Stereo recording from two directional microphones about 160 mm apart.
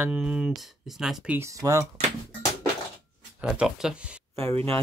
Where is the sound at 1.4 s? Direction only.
20° right (ahead or behind).